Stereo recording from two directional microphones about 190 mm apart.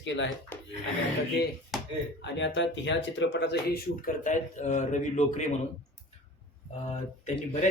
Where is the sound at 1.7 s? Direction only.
Centre (ahead or behind).